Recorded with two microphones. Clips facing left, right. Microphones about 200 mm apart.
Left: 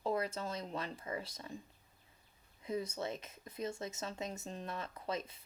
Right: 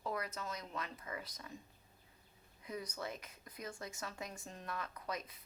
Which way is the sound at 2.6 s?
25° left (ahead or behind).